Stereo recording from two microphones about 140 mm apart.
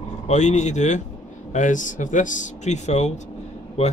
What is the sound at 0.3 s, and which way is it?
Speech, 55° left (ahead or behind).